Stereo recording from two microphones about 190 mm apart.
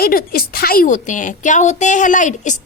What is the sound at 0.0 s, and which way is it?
A woman's voice, 50° left (ahead or behind).